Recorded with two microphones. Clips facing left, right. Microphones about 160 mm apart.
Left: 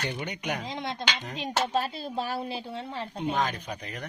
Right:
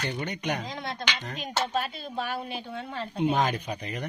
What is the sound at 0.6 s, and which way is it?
Speech, 20° left (ahead or behind).